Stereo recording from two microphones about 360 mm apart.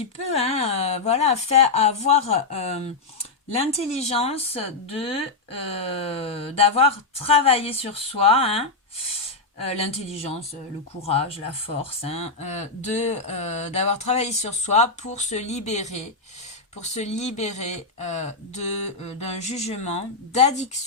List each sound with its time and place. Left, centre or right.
0.0 s speech: centre